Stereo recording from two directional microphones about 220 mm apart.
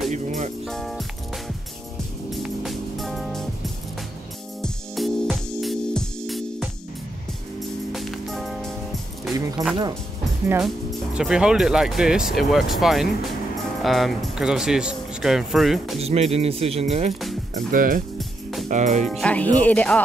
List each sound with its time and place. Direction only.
0.1 s speech: 35° right (ahead or behind)
0.7 s speech: centre (ahead or behind)
2.3 s music: centre (ahead or behind)
4.6 s music: centre (ahead or behind)
7.9 s music: centre (ahead or behind)
9.6 s speech: 15° right (ahead or behind)
10.5 s speech: 5° right (ahead or behind)
16.0 s speech: 30° right (ahead or behind)
17.6 s speech: 40° right (ahead or behind)
19.0 s speech: 5° left (ahead or behind)